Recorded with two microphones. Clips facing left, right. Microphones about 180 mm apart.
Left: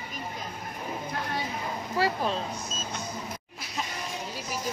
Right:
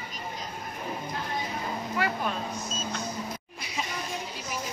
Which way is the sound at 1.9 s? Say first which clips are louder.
Left 3 dB; 35° left (ahead or behind).